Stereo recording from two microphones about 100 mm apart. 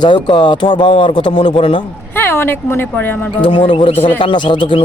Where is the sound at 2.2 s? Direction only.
20° left (ahead or behind).